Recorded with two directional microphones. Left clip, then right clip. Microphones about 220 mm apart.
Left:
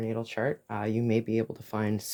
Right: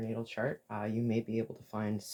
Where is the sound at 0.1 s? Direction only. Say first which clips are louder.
Left 4 dB; 50° left (ahead or behind).